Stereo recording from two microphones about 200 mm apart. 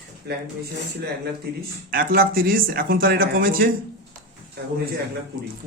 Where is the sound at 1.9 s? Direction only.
45° right (ahead or behind).